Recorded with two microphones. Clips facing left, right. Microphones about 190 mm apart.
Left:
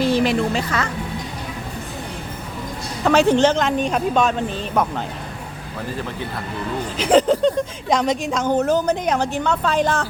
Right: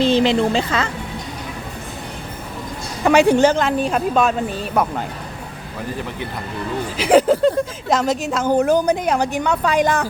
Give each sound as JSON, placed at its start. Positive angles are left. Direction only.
{"t": 0.0, "sound": "a woman's voice", "side_deg": -25}
{"t": 3.0, "sound": "a woman's voice", "side_deg": -10}
{"t": 6.9, "sound": "a woman's voice", "side_deg": -10}